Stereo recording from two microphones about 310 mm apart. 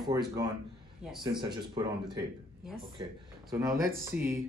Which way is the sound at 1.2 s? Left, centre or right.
Centre.